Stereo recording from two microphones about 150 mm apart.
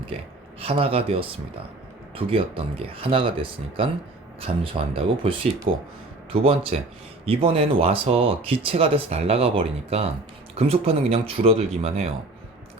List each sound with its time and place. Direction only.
0.6 s speech: 40° right (ahead or behind)
5.7 s speech: 70° right (ahead or behind)
6.3 s speech: 40° right (ahead or behind)